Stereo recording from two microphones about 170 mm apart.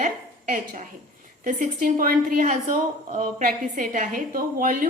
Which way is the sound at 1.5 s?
55° right (ahead or behind).